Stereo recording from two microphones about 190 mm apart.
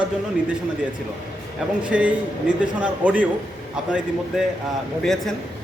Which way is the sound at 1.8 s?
5° right (ahead or behind).